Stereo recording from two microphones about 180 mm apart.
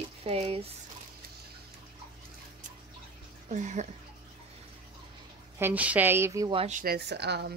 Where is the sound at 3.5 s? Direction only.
40° right (ahead or behind).